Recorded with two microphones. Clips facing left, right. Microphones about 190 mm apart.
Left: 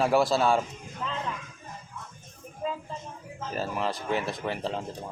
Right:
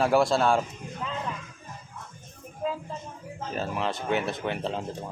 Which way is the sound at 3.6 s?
Centre (ahead or behind).